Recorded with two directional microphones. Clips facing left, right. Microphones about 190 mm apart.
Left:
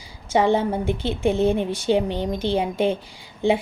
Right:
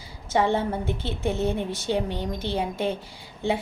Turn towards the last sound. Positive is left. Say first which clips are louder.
# left 6 dB
turn(degrees=15)  # may be behind; listen again after turning